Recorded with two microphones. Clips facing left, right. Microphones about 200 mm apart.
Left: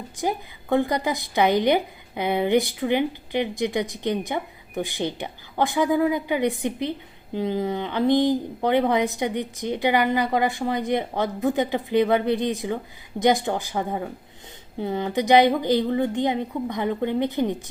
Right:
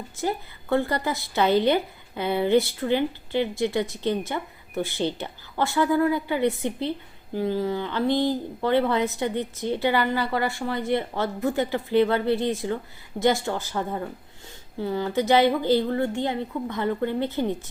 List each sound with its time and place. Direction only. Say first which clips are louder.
0.2 s a woman's voice: left 1 dB; 15° left (ahead or behind)